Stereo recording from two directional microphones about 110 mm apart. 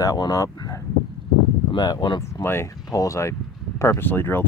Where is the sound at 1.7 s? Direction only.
40° left (ahead or behind).